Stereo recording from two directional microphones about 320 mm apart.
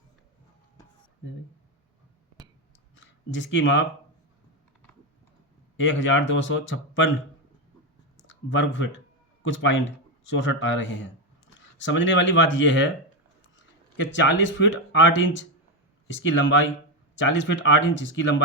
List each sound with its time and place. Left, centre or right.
3.3 s speech: left
5.7 s speech: left
8.3 s speech: left
13.9 s speech: left